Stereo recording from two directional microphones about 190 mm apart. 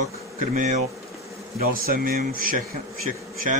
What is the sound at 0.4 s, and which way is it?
Speech, 40° right (ahead or behind).